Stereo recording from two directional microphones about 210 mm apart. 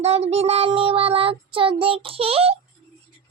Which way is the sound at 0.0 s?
30° right (ahead or behind).